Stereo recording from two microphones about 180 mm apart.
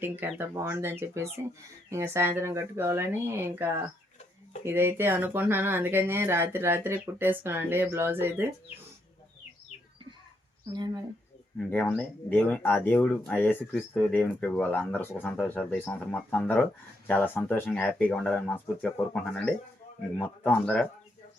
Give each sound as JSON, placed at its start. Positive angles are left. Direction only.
{"t": 0.0, "sound": "speech", "side_deg": -10}
{"t": 10.7, "sound": "speech", "side_deg": -25}
{"t": 11.7, "sound": "speech", "side_deg": 10}
{"t": 20.1, "sound": "speech", "side_deg": 10}